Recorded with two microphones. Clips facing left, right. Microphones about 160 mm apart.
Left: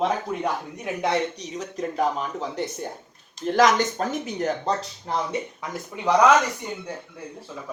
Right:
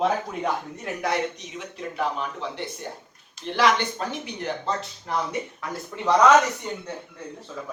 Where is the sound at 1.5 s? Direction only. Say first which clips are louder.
Left 4 dB; 40° left (ahead or behind).